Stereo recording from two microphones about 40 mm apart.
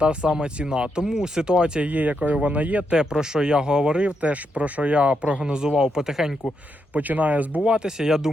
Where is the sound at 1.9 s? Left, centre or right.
Right.